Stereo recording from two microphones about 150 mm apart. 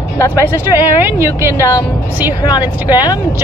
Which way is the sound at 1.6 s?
25° left (ahead or behind).